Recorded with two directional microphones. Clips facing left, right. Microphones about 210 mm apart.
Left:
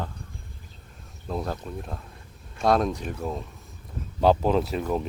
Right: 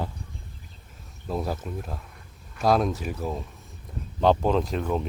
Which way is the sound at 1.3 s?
5° right (ahead or behind).